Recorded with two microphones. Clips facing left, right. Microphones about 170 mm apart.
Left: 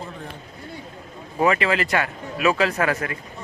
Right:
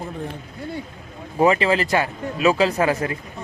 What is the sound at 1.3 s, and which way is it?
Speech, 25° right (ahead or behind).